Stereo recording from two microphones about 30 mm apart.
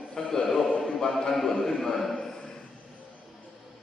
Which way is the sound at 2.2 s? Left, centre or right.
Left.